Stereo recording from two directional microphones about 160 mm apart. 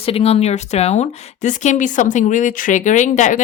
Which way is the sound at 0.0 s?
40° left (ahead or behind).